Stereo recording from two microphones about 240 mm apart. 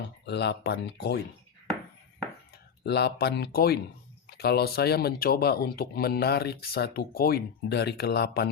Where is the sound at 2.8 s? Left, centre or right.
Left.